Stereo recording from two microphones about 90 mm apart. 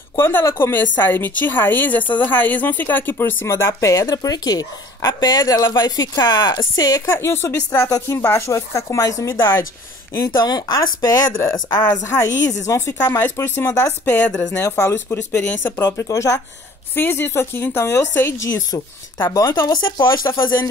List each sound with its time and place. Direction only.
0.2 s speech: 25° left (ahead or behind)
3.5 s speech: 35° left (ahead or behind)
7.1 s speech: 30° left (ahead or behind)
10.4 s speech: 45° left (ahead or behind)
13.0 s speech: 25° left (ahead or behind)
14.6 s speech: 30° left (ahead or behind)